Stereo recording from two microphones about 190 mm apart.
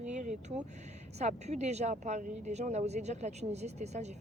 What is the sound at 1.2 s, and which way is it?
Speech, 35° right (ahead or behind).